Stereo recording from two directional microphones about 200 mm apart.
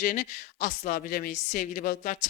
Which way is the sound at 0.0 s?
45° left (ahead or behind).